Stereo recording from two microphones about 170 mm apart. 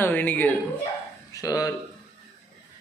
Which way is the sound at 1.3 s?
20° left (ahead or behind).